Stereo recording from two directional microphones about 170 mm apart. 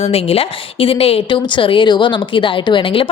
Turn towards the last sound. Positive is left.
turn(degrees=30)  # may be behind; listen again after turning